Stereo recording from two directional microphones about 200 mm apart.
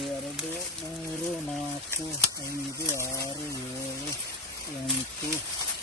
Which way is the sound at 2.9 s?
15° left (ahead or behind).